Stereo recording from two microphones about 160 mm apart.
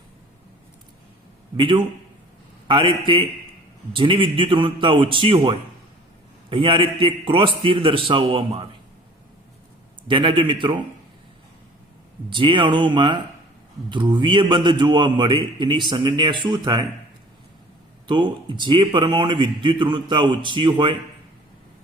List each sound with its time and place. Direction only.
1.5 s a man's voice: 30° right (ahead or behind)
10.1 s a man's voice: 30° right (ahead or behind)
12.3 s a man's voice: 30° right (ahead or behind)
18.1 s a man's voice: 30° right (ahead or behind)